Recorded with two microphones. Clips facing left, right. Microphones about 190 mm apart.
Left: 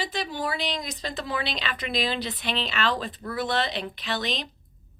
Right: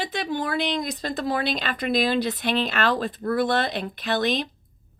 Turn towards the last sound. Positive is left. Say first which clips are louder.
# right 6 dB
turn(degrees=-55)  # may be behind; listen again after turning